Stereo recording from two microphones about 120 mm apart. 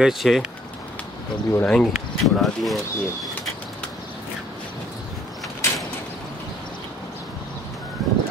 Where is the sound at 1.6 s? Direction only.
5° left (ahead or behind).